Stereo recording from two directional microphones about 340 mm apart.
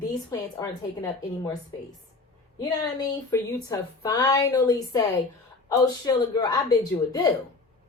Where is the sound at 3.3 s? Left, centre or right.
Centre.